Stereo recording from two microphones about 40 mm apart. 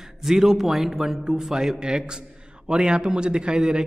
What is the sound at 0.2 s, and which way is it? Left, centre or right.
Speech, centre.